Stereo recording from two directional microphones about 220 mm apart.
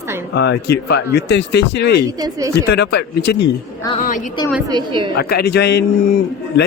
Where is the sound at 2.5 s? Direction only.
50° left (ahead or behind).